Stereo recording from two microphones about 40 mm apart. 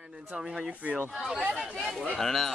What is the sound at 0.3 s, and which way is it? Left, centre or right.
Speech, centre.